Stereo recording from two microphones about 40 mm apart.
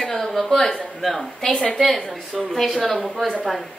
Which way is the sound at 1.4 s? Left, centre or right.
Centre.